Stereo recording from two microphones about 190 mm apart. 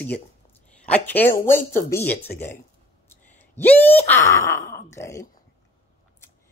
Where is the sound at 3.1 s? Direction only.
10° left (ahead or behind).